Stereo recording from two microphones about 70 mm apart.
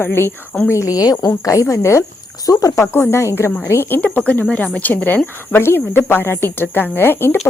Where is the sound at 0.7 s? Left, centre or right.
Left.